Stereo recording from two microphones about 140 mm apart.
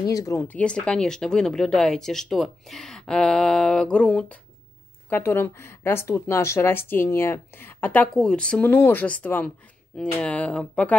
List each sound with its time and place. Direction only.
0.0 s speech: 25° left (ahead or behind); by 11.0 s 10° left (ahead or behind)